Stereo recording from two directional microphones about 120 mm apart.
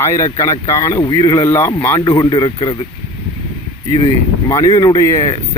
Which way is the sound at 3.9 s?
45° left (ahead or behind).